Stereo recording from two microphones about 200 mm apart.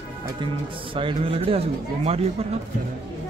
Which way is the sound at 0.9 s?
25° right (ahead or behind).